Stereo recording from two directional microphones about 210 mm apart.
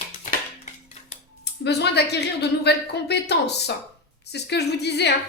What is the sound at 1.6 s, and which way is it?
A woman's voice, 50° left (ahead or behind).